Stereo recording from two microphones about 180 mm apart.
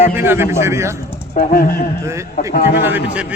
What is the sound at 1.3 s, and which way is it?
Speech, 55° left (ahead or behind).